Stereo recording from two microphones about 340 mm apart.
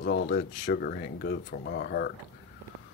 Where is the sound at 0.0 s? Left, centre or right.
Left.